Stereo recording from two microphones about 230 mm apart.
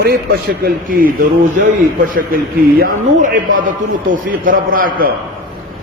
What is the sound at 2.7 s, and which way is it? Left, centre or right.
A man's voice, right.